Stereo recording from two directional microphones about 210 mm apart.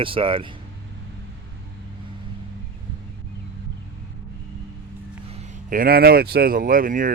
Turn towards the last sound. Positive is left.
turn(degrees=-40)  # may be behind; listen again after turning